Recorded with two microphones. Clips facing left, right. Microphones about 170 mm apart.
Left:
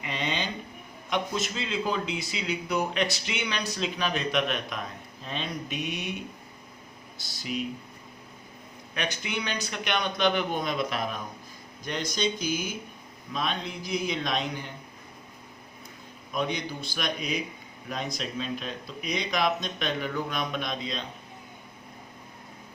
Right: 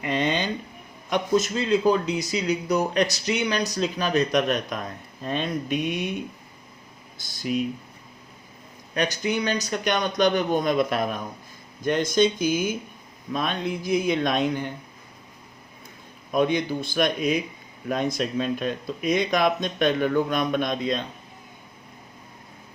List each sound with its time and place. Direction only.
0.0 s a sound: 50° right (ahead or behind)
1.1 s speech: 45° right (ahead or behind)
5.2 s speech: 50° right (ahead or behind)
7.2 s speech: 50° right (ahead or behind)
9.0 s speech: 40° right (ahead or behind); by 14.7 s 55° right (ahead or behind)
16.3 s speech: 50° right (ahead or behind)